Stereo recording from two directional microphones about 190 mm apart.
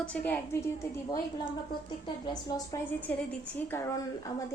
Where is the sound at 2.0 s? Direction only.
20° left (ahead or behind).